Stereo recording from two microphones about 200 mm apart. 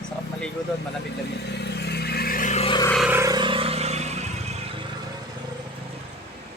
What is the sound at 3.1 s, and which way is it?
Vehicle, 15° right (ahead or behind).